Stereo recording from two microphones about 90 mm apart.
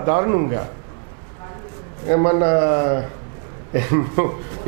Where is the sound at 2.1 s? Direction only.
20° right (ahead or behind).